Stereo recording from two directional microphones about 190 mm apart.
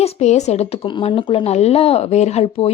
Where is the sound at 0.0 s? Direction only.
35° left (ahead or behind).